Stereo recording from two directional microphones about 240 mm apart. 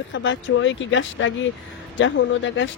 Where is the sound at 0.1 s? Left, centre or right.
Left.